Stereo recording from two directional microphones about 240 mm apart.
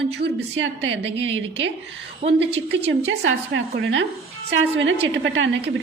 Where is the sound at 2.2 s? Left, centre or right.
Right.